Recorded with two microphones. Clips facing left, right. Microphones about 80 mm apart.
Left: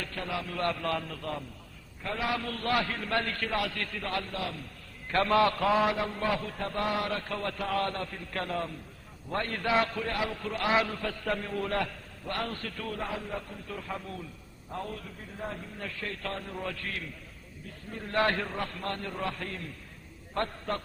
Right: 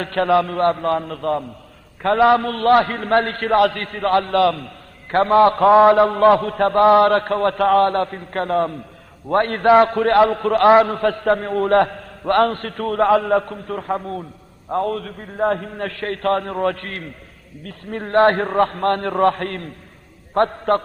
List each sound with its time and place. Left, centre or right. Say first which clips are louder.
0.0 s a man's voice: right 18 dB; right
2.0 s a man's voice: right 18 dB; right
5.1 s a man's voice: right 11 dB; right
17.6 s a man's voice: right 13 dB; right